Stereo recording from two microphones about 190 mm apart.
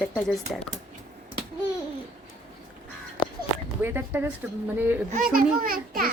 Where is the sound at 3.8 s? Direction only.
10° right (ahead or behind).